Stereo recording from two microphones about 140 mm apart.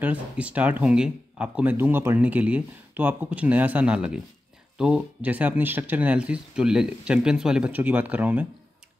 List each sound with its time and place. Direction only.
0.0 s speech: 10° right (ahead or behind)